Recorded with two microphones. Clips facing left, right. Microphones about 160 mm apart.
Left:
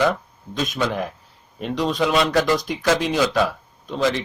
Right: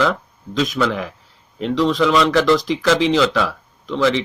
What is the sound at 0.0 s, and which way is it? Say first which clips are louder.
A man's voice: right 1 dB; 90° right.